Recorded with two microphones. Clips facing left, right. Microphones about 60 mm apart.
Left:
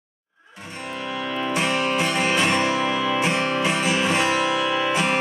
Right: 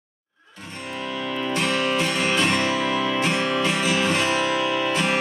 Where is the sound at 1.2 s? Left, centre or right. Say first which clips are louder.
Left 1 dB; centre.